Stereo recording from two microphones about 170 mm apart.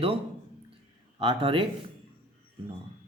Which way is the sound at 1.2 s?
30° right (ahead or behind).